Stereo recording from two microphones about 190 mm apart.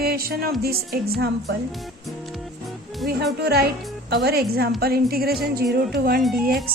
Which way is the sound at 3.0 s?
55° right (ahead or behind).